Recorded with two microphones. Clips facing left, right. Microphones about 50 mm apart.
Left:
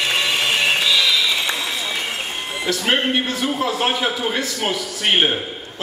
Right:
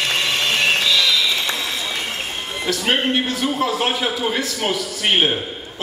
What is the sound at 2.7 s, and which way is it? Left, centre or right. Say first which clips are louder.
A man's voice: even; centre.